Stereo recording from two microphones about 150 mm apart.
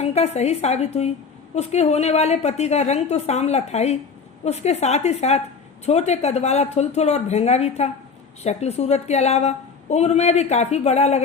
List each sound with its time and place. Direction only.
0.0 s a woman's voice: 45° left (ahead or behind)